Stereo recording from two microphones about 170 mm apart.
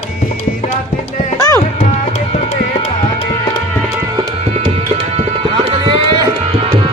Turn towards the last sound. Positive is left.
turn(degrees=-30)  # may be behind; listen again after turning